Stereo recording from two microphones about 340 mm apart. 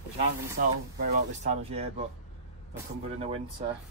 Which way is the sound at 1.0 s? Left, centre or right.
Centre.